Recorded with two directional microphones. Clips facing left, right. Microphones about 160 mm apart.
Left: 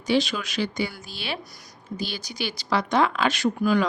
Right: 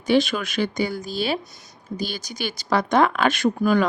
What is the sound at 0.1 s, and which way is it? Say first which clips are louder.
Speech: right 4 dB; 55° right (ahead or behind).